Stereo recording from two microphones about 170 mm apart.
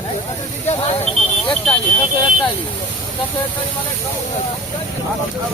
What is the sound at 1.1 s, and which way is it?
Speech, centre (ahead or behind).